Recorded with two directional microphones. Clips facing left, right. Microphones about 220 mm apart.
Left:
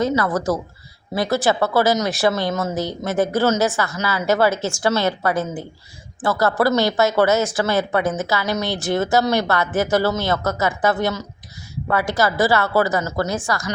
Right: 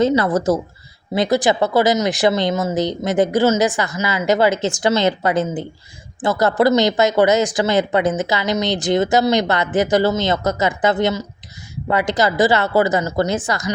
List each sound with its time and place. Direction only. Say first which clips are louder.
0.0 s speech: right 4 dB; 25° right (ahead or behind)